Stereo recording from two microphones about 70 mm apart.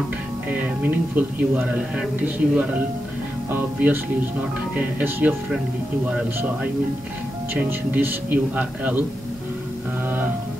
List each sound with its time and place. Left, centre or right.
0.5 s speech: right
4.7 s speech: right
7.9 s speech: right